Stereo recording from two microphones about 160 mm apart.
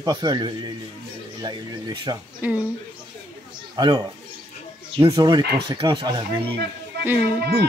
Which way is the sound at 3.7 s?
25° right (ahead or behind).